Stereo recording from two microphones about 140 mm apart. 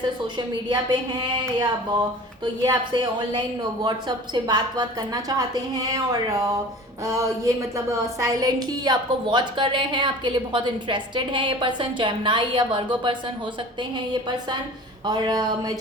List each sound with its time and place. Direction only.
0.3 s a woman's voice: 30° right (ahead or behind)
4.4 s a woman's voice: 30° right (ahead or behind)